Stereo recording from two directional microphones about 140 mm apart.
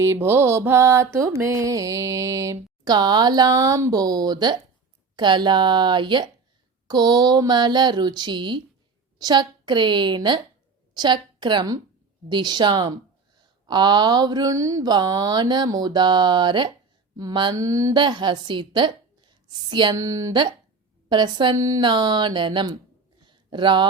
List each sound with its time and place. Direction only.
0.0 s mantra: 20° right (ahead or behind)
5.1 s a woman's voice: 35° right (ahead or behind)
23.2 s a sound: 35° right (ahead or behind)